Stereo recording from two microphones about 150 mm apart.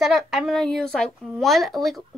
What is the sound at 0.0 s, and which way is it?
A woman's voice, centre (ahead or behind).